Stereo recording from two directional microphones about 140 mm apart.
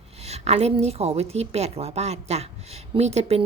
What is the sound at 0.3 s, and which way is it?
A woman's voice, 50° right (ahead or behind).